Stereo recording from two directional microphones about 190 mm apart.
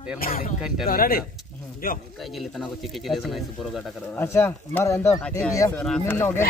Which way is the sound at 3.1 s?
Centre (ahead or behind).